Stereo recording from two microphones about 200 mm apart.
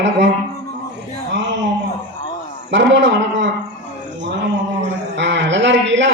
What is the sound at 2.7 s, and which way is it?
Speech, 60° right (ahead or behind).